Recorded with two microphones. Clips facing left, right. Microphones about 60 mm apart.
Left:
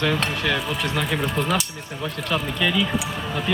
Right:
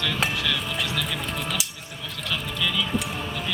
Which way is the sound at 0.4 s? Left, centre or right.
Left.